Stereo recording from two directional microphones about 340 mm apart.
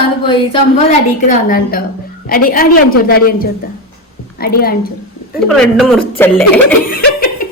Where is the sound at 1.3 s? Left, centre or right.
Left.